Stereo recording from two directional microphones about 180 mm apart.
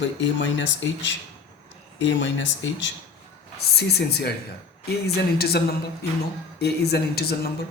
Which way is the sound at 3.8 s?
65° left (ahead or behind).